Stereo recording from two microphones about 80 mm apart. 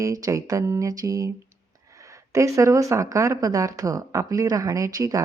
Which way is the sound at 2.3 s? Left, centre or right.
Right.